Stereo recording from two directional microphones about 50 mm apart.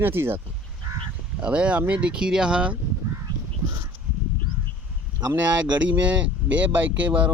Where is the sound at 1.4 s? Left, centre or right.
Right.